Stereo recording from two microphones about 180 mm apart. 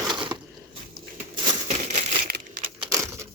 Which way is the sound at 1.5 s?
40° right (ahead or behind).